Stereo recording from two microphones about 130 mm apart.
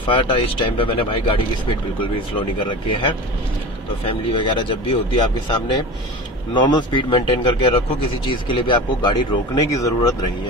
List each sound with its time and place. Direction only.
0.1 s speech: 40° left (ahead or behind)